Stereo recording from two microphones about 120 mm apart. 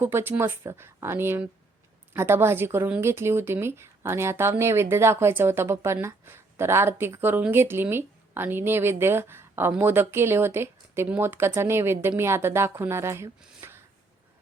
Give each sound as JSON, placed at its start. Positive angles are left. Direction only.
{"t": 0.0, "sound": "speech", "side_deg": -20}